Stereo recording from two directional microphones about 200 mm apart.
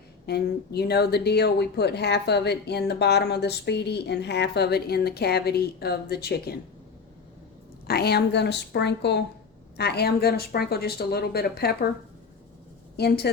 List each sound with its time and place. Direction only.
0.3 s a woman's voice: 55° left (ahead or behind)
7.9 s a woman's voice: 50° left (ahead or behind)
13.0 s a woman's voice: 55° left (ahead or behind)